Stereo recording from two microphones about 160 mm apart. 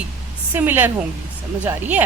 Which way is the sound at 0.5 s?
10° right (ahead or behind).